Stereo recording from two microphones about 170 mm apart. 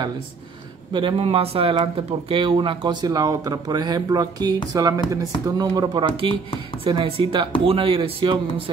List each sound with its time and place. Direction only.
0.9 s speech: 30° right (ahead or behind)